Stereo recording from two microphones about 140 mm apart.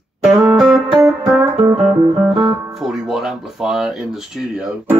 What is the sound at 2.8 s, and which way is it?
Speech, centre (ahead or behind).